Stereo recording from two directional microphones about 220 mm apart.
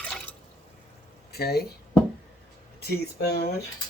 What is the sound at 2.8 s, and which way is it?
Speech, 45° left (ahead or behind).